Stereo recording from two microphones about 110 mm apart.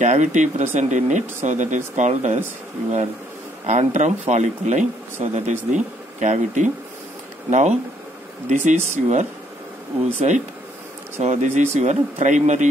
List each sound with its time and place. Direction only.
0.0 s speech: 90° right
3.6 s speech: 90° right